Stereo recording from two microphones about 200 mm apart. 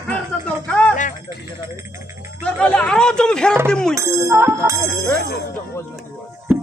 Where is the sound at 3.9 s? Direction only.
15° right (ahead or behind).